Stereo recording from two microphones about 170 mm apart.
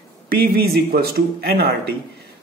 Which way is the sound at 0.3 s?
65° right (ahead or behind).